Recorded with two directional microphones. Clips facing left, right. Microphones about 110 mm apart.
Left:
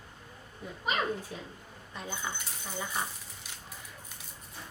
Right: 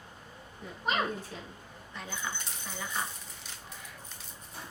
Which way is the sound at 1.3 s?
15° left (ahead or behind).